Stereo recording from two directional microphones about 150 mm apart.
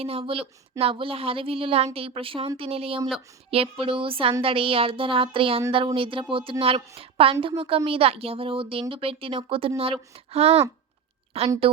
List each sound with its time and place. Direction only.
0.0 s speech: 40° right (ahead or behind)